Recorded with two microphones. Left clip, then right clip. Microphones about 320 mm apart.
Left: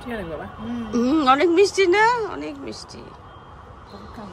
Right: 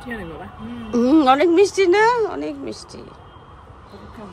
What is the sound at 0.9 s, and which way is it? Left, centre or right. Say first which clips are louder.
A woman's voice: right 3 dB; centre.